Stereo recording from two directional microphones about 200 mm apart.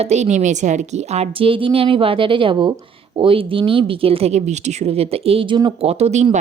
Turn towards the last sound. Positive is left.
turn(degrees=-35)  # may be behind; listen again after turning